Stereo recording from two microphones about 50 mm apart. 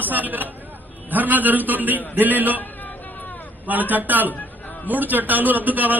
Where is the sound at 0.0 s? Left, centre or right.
Right.